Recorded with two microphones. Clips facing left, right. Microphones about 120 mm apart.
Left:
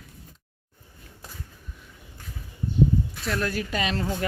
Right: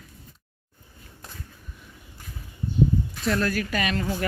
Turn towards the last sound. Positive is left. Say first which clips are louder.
# right 1 dB
turn(degrees=20)  # may be behind; listen again after turning